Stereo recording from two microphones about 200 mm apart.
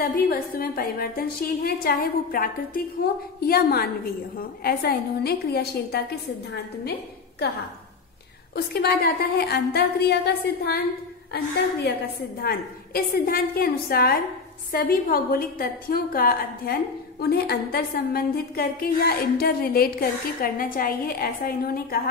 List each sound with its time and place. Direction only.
0.0 s a woman's voice: 50° left (ahead or behind)
8.7 s a woman's voice: 50° left (ahead or behind)
12.4 s a woman's voice: 50° left (ahead or behind)